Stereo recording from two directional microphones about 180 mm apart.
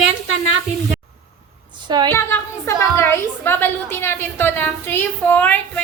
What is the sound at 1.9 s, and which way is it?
Speech, 25° right (ahead or behind).